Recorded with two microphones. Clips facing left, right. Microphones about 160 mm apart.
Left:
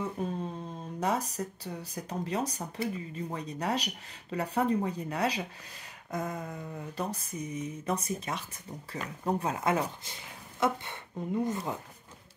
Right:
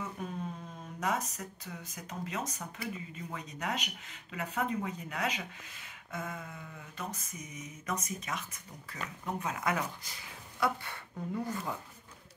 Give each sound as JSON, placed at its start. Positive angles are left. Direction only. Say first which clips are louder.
{"t": 0.0, "sound": "speech", "louder": "left 5 dB", "side_deg": 30}